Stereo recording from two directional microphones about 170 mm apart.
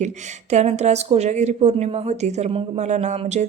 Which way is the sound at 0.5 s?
40° right (ahead or behind).